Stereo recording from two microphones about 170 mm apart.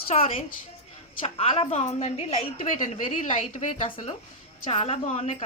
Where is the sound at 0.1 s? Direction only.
35° left (ahead or behind).